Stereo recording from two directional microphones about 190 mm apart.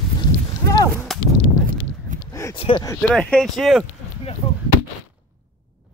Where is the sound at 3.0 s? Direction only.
5° left (ahead or behind).